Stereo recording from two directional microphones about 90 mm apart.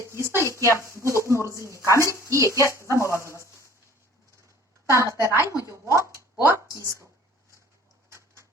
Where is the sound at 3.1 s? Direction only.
30° left (ahead or behind).